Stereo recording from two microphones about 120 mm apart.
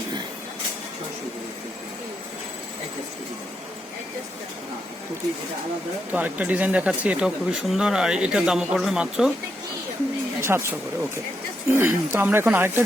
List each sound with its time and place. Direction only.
6.1 s speech: 10° right (ahead or behind)
10.4 s speech: 20° right (ahead or behind)
11.8 s speech: 15° right (ahead or behind)